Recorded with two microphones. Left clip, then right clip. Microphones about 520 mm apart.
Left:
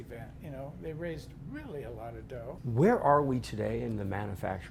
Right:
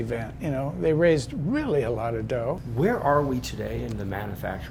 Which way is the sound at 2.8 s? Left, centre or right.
Left.